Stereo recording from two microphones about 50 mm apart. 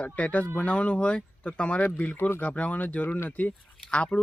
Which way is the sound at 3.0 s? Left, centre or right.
Left.